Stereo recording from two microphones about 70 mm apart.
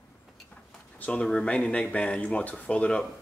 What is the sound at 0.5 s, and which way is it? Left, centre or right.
Speech, centre.